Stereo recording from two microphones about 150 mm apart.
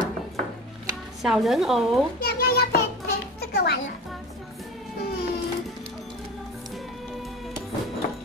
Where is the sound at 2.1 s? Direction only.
90° left.